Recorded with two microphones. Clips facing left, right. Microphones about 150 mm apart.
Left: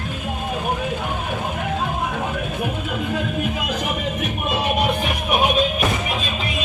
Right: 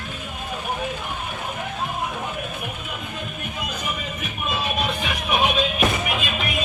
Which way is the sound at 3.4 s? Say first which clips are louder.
Left 6 dB; 90° left.